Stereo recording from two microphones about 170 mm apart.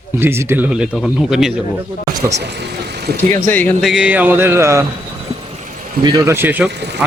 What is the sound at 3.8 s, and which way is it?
A man's voice, 5° right (ahead or behind).